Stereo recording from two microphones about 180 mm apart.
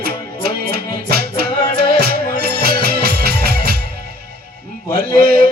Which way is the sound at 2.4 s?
60° right (ahead or behind).